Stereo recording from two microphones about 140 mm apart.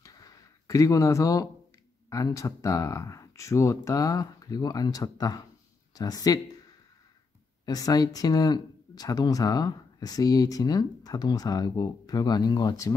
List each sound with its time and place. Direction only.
0.0 s a sound: 25° left (ahead or behind)
2.0 s speech: 25° left (ahead or behind)
7.6 s speech: 25° left (ahead or behind)